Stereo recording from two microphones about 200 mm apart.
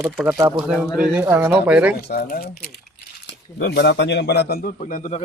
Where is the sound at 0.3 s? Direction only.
15° right (ahead or behind).